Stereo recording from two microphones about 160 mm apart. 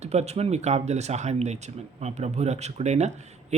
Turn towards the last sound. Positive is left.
turn(degrees=-45)  # may be behind; listen again after turning